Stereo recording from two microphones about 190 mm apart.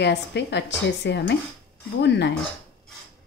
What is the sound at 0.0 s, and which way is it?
A woman's voice, 65° left (ahead or behind).